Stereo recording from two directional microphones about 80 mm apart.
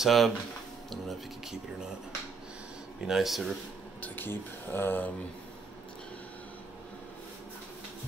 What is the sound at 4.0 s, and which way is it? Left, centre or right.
Speech, left.